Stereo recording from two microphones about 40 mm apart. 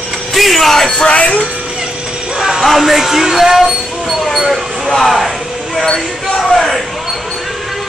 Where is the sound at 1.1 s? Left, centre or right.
Left.